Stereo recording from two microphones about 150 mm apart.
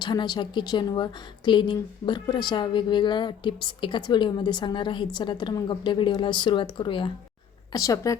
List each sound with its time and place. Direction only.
0.0 s a woman's voice: 30° left (ahead or behind)
7.7 s a woman's voice: 20° left (ahead or behind)